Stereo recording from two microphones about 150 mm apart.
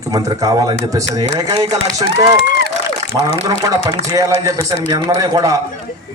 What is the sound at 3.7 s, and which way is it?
A man's voice, 25° right (ahead or behind).